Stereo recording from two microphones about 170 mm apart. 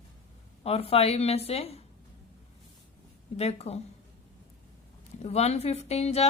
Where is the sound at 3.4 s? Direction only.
40° left (ahead or behind).